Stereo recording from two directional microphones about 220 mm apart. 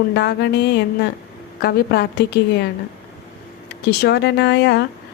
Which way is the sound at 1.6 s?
45° left (ahead or behind).